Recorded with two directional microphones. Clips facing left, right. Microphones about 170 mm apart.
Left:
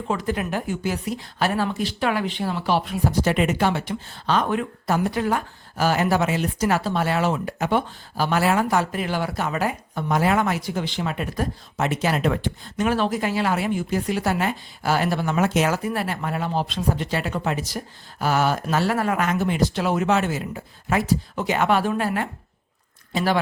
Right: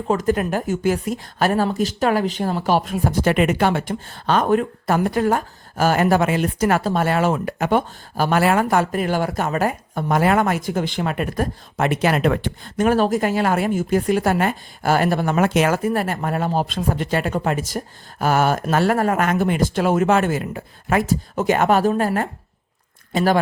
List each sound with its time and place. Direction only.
0.1 s a woman's voice: 45° right (ahead or behind)